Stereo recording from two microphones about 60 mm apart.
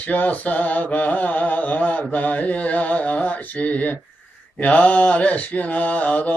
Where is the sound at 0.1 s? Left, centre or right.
Left.